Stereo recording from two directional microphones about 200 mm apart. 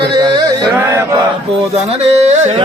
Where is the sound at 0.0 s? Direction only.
25° right (ahead or behind).